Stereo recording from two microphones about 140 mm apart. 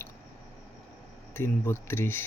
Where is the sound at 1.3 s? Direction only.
15° left (ahead or behind).